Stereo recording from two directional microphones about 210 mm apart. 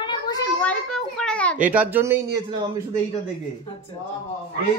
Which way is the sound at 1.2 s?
5° left (ahead or behind).